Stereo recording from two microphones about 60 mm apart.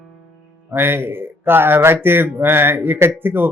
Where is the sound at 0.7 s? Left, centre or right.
Right.